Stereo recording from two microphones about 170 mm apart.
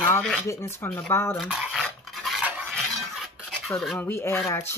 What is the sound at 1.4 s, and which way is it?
Stir, 5° right (ahead or behind).